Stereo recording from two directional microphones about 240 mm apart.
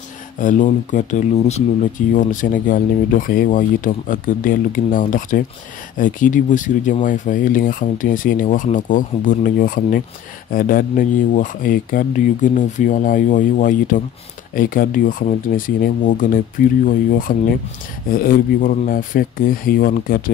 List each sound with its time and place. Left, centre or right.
0.4 s speech: left